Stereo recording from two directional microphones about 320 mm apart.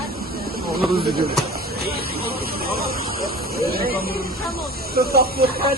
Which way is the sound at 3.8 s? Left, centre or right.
Right.